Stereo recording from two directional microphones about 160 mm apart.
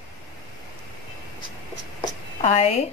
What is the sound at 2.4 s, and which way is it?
Speech, 40° left (ahead or behind).